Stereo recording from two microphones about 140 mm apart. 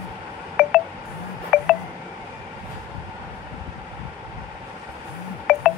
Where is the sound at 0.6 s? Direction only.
5° right (ahead or behind).